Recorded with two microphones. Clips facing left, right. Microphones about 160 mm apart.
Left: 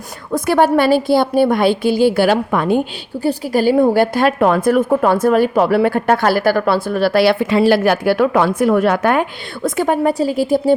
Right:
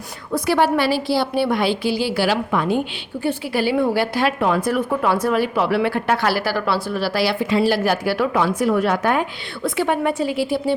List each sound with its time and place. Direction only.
0.3 s a woman's voice: 50° left (ahead or behind)
9.6 s a woman's voice: 45° left (ahead or behind)